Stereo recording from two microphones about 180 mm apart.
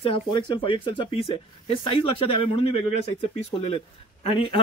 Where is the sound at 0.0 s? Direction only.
30° left (ahead or behind).